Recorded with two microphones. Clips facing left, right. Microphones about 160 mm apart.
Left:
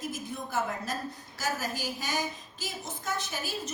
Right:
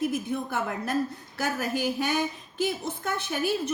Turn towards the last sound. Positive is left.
turn(degrees=-60)  # may be behind; listen again after turning